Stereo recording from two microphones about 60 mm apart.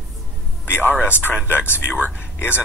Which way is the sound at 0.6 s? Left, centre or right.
Left.